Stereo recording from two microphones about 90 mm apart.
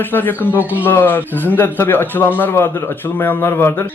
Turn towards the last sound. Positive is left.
turn(degrees=30)  # may be behind; listen again after turning